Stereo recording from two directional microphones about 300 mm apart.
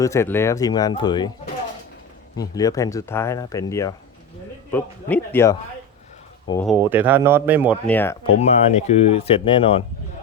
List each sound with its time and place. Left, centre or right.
0.0 s speech: centre
2.3 s speech: centre
6.7 s speech: centre
7.9 s speech: centre
8.4 s speech: left